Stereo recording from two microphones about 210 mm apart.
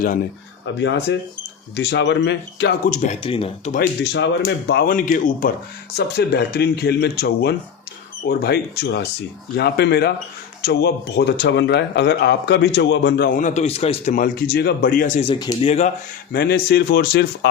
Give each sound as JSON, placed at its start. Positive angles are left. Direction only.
{"t": 0.8, "sound": "speech", "side_deg": 55}
{"t": 2.8, "sound": "speech", "side_deg": 35}
{"t": 3.7, "sound": "speech", "side_deg": 45}
{"t": 6.0, "sound": "speech", "side_deg": 50}
{"t": 13.4, "sound": "speech", "side_deg": 35}
{"t": 15.3, "sound": "speech", "side_deg": 20}
{"t": 16.3, "sound": "speech", "side_deg": 45}